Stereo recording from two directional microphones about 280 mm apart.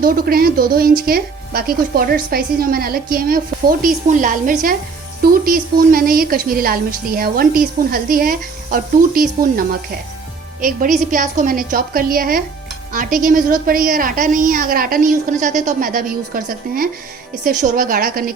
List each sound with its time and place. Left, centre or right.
0.0 s a woman's voice: right